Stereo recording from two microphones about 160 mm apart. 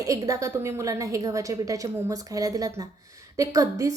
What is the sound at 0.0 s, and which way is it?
A woman's voice, 20° right (ahead or behind).